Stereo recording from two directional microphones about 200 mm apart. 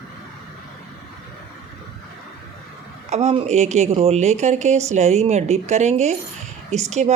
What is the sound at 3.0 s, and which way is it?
Speech, 35° right (ahead or behind).